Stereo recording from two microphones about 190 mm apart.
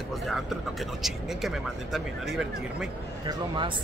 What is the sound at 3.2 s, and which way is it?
Speech, 25° right (ahead or behind).